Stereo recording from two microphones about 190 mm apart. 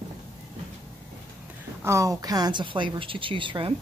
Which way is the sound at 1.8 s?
15° right (ahead or behind).